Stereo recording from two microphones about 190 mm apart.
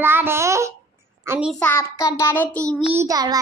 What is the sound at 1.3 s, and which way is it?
Speech, 5° right (ahead or behind).